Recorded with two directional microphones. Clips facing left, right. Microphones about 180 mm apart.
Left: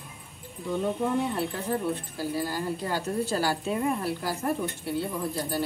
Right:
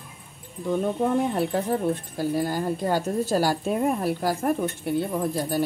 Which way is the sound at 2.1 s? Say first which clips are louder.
Right 5 dB; 50° right (ahead or behind).